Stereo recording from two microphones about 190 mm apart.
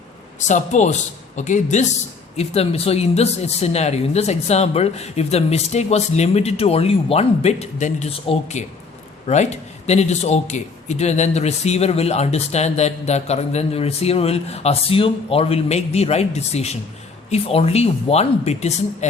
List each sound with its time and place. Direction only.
0.3 s a man's voice: 40° left (ahead or behind)